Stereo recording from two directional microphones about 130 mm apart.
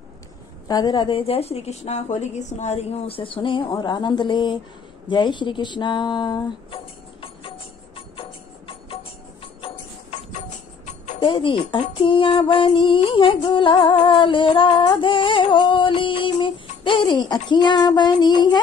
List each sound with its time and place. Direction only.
0.7 s a woman's voice: 30° left (ahead or behind)
5.0 s a sound: 40° left (ahead or behind)
11.1 s speech: 40° left (ahead or behind)
14.0 s music: 40° left (ahead or behind)